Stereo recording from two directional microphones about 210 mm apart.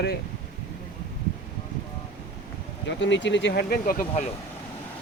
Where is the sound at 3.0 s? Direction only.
60° left (ahead or behind); by 4.3 s 40° left (ahead or behind).